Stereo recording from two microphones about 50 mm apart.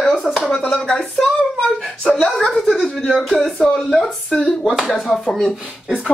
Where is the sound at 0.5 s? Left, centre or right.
Centre.